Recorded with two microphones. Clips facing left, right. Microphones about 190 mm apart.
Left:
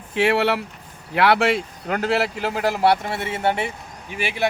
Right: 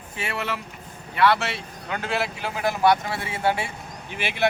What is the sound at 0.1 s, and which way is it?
Speech, 85° left.